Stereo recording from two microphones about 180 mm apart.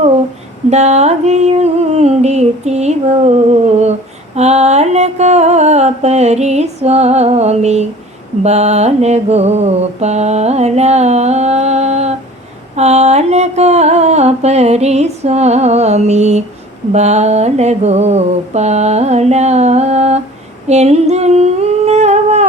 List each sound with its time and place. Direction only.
0.7 s humming: 40° right (ahead or behind)
4.4 s mantra: 35° right (ahead or behind)
20.7 s humming: 35° right (ahead or behind)